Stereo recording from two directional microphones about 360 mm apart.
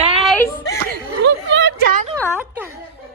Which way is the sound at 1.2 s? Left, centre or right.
Right.